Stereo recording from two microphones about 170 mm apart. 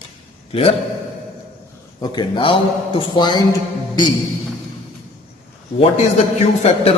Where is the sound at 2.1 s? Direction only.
30° left (ahead or behind).